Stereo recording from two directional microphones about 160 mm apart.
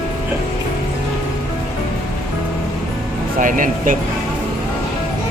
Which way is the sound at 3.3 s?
55° right (ahead or behind).